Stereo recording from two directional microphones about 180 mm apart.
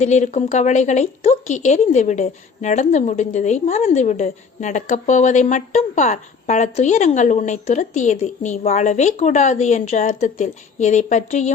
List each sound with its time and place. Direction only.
0.0 s a woman's voice: 40° left (ahead or behind)